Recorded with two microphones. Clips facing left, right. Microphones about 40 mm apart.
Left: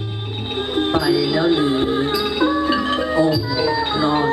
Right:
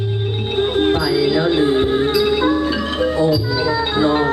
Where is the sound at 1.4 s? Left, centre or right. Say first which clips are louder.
Right 2 dB; right.